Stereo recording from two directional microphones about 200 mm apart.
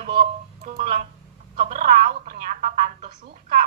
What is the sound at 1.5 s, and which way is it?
Speech, 35° right (ahead or behind).